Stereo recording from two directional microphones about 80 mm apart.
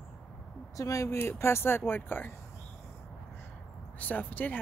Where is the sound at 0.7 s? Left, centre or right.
Left.